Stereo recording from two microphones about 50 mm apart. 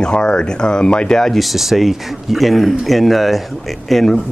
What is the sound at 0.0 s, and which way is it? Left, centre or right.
Speech, centre.